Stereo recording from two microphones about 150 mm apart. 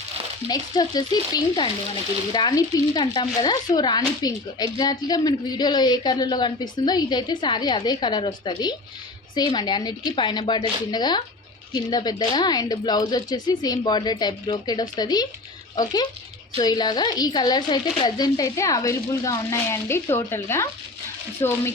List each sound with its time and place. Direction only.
0.4 s speech: 25° left (ahead or behind)